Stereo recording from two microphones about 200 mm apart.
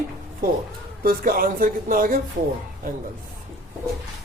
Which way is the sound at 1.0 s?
45° right (ahead or behind).